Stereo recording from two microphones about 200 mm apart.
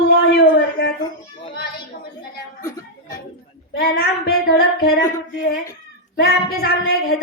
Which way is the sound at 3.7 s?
50° left (ahead or behind).